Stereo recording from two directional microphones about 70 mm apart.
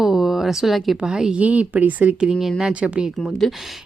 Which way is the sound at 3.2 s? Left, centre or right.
Centre.